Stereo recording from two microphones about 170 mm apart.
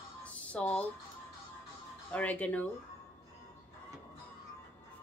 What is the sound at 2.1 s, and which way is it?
Speech, 10° left (ahead or behind).